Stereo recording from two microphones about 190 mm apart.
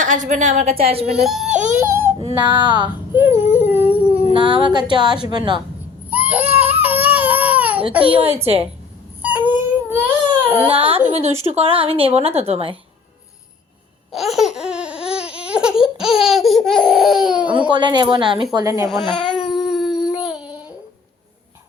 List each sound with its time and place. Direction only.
0.0 s a woman's voice: 40° right (ahead or behind)
1.1 s speech: centre (ahead or behind)
2.4 s speech: 25° right (ahead or behind)
3.1 s a sound: 10° right (ahead or behind)
4.3 s speech: 25° right (ahead or behind)
6.1 s baby cry: 10° right (ahead or behind)
9.2 s baby cry: 10° right (ahead or behind)
10.7 s speech: 30° right (ahead or behind)
14.1 s laughter: centre (ahead or behind)
17.7 s speech: 25° right (ahead or behind)
19.1 s baby cry: 5° left (ahead or behind)
19.5 s howl: centre (ahead or behind)
20.2 s a sound: 5° right (ahead or behind)